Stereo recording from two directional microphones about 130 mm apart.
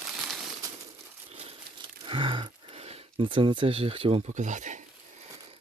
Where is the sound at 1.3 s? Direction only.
50° right (ahead or behind).